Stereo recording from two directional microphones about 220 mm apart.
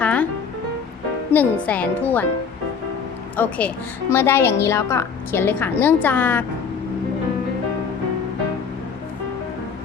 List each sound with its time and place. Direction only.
0.0 s music: 5° left (ahead or behind)
1.3 s a woman's voice: 10° left (ahead or behind)
3.3 s a woman's voice: 10° left (ahead or behind)